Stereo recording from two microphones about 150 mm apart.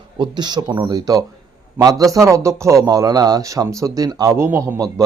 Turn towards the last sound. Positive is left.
turn(degrees=-20)  # may be behind; listen again after turning